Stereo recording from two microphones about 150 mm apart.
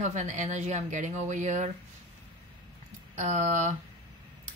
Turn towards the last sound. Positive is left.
turn(degrees=-50)  # may be behind; listen again after turning